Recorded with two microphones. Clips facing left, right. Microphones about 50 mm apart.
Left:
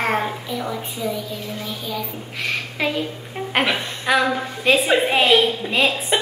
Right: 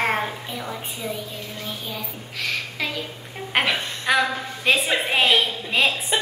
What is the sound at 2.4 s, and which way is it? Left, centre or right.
Speech, centre.